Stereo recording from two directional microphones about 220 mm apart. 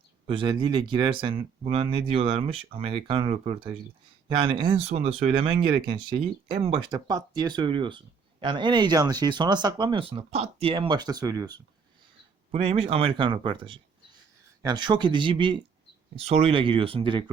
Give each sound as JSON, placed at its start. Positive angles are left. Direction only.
{"t": 0.3, "sound": "speech", "side_deg": -20}